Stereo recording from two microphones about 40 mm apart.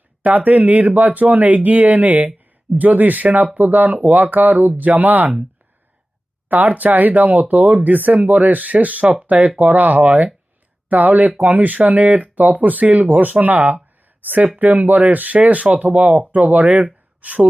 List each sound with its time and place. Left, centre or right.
0.2 s speech: right
6.5 s speech: right